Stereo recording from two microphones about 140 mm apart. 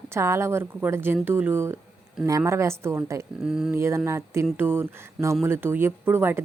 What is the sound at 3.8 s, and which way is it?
A woman's voice, 20° right (ahead or behind).